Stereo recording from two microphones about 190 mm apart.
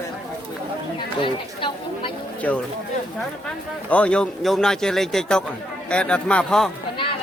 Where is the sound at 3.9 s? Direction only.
5° left (ahead or behind).